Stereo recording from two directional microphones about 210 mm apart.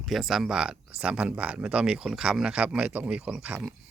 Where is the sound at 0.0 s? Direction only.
Centre (ahead or behind).